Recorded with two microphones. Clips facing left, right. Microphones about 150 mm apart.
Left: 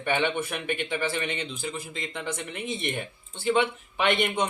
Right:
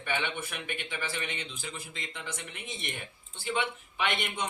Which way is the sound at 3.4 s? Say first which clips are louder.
Left 8 dB; 65° left (ahead or behind).